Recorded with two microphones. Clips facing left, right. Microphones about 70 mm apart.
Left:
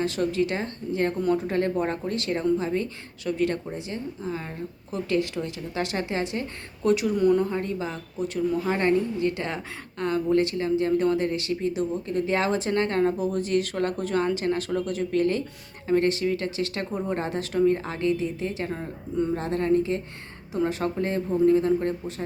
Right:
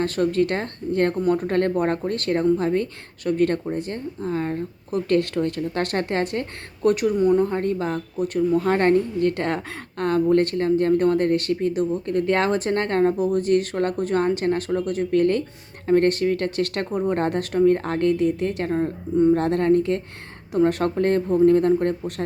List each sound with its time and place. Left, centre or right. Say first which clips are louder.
0.0 s speech: right 4 dB; right
7.2 s speech: right 2 dB; right
7.4 s a woman's voice: right 5 dB; right
18.7 s speech: right 9 dB; right
19.4 s a woman's voice: right 4 dB; right